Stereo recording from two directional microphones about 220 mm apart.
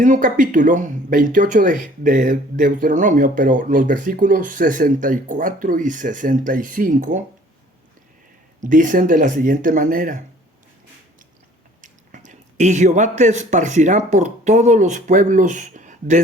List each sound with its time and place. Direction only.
0.0 s speech: 35° right (ahead or behind)
8.6 s speech: 35° right (ahead or behind)
11.8 s speech: 35° right (ahead or behind)